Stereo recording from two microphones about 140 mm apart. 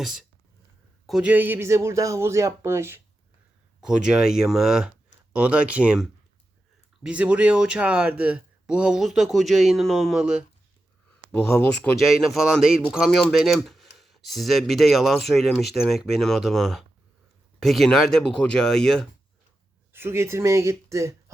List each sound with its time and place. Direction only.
0.0 s speech: centre (ahead or behind)
3.8 s speech: 5° right (ahead or behind)
11.3 s speech: 5° left (ahead or behind)
11.9 s speech: centre (ahead or behind)
19.9 s speech: 15° right (ahead or behind)